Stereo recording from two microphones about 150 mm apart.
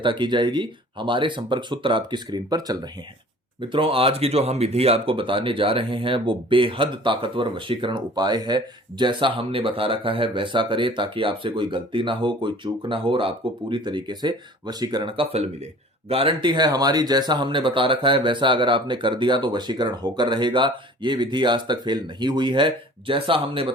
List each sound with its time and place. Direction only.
0.0 s speech: 30° right (ahead or behind)